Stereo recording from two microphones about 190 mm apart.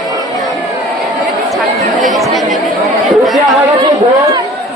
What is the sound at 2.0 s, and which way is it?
Chatter, centre (ahead or behind).